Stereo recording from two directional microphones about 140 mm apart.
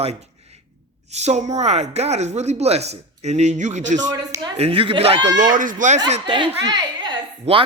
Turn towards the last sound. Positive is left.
turn(degrees=-50)  # may be behind; listen again after turning